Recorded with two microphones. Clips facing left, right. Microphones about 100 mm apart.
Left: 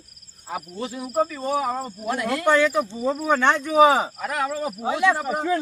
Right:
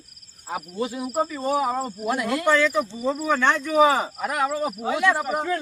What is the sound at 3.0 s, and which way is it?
Speech, centre (ahead or behind).